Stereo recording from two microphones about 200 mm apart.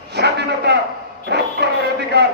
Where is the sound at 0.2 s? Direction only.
55° right (ahead or behind).